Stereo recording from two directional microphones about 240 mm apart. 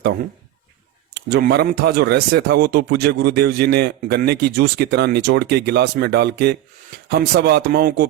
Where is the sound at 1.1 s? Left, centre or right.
Right.